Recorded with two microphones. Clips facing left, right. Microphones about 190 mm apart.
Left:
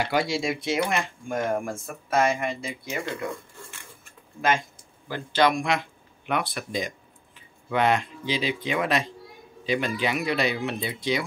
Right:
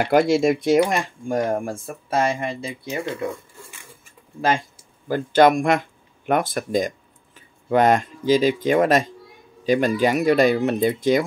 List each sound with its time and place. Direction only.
0.0 s speech: 50° right (ahead or behind); by 3.3 s 30° right (ahead or behind)
5.0 s speech: 45° right (ahead or behind)